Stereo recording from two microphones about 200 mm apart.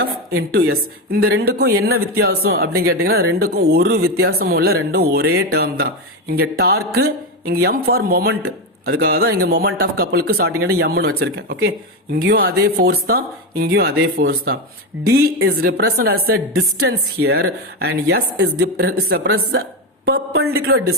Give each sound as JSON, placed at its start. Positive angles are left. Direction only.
{"t": 0.3, "sound": "speech", "side_deg": -50}